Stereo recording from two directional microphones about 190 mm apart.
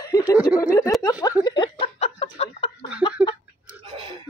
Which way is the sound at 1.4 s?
25° left (ahead or behind).